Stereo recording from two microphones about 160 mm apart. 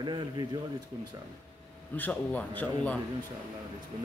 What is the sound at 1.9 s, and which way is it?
Speech, 10° left (ahead or behind).